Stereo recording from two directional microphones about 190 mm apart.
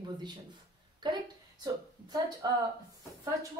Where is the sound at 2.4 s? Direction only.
20° right (ahead or behind).